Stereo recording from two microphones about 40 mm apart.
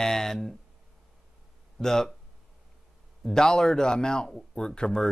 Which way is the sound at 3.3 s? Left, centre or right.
Centre.